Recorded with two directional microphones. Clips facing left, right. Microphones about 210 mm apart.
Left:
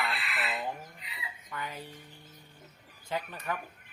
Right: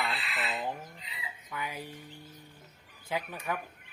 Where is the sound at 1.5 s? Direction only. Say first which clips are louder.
Right 1 dB; 10° right (ahead or behind).